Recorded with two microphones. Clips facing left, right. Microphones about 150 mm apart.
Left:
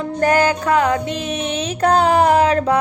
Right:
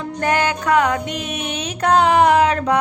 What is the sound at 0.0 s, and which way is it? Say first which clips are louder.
Music: left 4 dB; 40° left (ahead or behind).